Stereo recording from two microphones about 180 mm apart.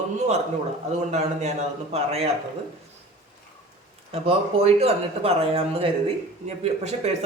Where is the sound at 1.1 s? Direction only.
40° right (ahead or behind).